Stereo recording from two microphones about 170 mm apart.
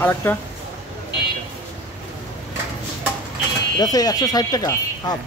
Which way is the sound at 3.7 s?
20° left (ahead or behind).